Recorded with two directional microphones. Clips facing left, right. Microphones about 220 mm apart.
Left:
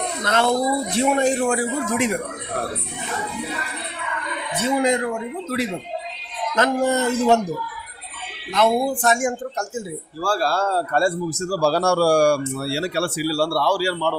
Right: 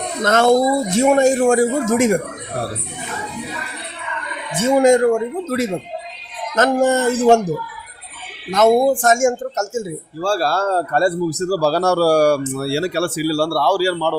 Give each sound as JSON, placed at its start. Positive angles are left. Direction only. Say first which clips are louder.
{"t": 0.3, "sound": "a man's voice", "louder": "right 6 dB", "side_deg": -45}
{"t": 4.5, "sound": "a man's voice", "louder": "right 7 dB", "side_deg": -45}
{"t": 8.5, "sound": "a man's voice", "louder": "right 6 dB", "side_deg": -45}
{"t": 10.2, "sound": "speech", "louder": "right 4 dB", "side_deg": -25}
{"t": 10.4, "sound": "a man's voice", "louder": "right 3 dB", "side_deg": -45}